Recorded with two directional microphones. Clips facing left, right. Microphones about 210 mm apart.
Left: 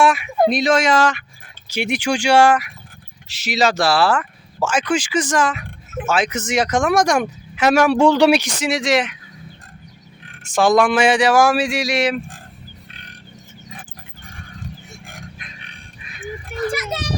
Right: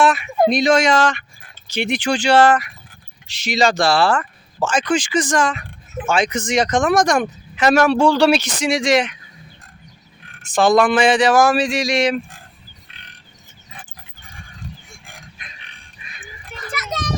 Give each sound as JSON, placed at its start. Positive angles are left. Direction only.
{"t": 0.0, "sound": "speech", "side_deg": 10}
{"t": 10.4, "sound": "speech", "side_deg": 10}
{"t": 14.9, "sound": "a sound", "side_deg": 0}
{"t": 16.5, "sound": "children playing", "side_deg": 60}